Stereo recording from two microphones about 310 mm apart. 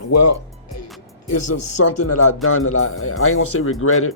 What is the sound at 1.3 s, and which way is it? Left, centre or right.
Speech, left.